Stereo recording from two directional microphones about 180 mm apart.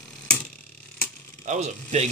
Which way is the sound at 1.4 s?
40° right (ahead or behind).